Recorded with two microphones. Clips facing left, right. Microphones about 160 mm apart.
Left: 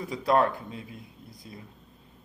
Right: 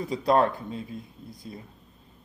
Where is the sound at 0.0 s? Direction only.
25° right (ahead or behind).